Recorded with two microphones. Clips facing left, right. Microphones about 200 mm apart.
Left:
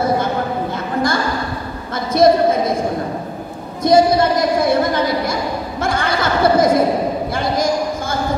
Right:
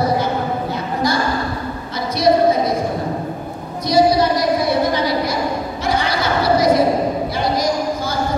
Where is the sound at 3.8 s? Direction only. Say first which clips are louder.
Left 2 dB; 50° left (ahead or behind).